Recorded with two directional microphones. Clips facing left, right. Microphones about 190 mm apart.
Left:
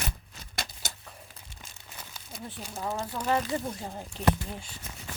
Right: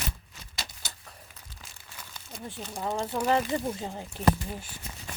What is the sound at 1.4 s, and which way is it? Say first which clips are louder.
Crumpling: even; 30° left (ahead or behind).